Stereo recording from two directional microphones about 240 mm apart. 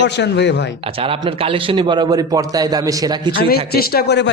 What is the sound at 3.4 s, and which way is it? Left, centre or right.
Speech, left.